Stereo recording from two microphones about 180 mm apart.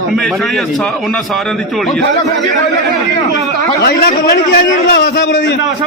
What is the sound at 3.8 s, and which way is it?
A man's voice, 65° left (ahead or behind).